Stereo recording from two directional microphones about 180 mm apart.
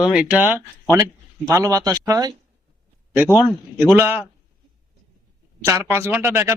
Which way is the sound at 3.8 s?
10° right (ahead or behind).